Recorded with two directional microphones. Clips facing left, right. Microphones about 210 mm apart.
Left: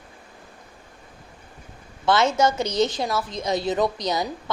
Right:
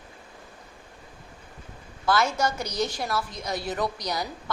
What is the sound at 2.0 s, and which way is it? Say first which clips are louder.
A woman's voice: left 5 dB; 25° left (ahead or behind).